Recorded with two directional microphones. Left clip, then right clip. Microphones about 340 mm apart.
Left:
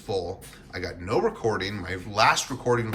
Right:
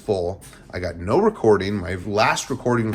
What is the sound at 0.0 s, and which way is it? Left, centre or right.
A man's voice, centre.